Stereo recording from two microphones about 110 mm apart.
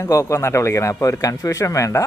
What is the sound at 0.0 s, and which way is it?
Speech, 30° left (ahead or behind).